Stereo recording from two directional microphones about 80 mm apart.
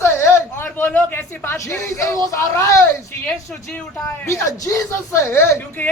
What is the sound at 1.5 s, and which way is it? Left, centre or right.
Speech, left.